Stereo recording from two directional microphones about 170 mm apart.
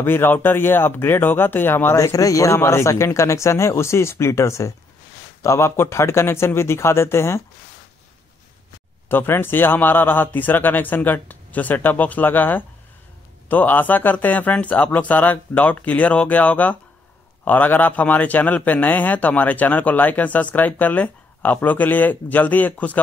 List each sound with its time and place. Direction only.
0.0 s a man's voice: 10° left (ahead or behind)
9.1 s a man's voice: 10° left (ahead or behind)